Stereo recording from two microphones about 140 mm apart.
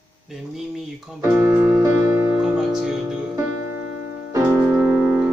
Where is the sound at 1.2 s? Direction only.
20° right (ahead or behind).